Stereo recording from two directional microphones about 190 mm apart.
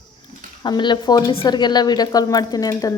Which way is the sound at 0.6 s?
25° left (ahead or behind).